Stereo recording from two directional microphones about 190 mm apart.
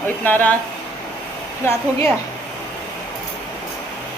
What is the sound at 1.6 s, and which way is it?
Speech, 15° left (ahead or behind).